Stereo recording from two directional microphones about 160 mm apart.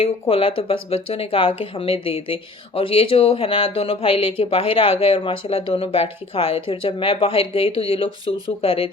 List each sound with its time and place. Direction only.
0.0 s speech: 35° left (ahead or behind)